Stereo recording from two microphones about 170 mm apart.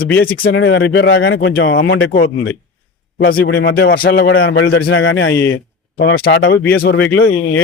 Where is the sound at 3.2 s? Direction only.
60° left (ahead or behind); by 5.3 s 90° left.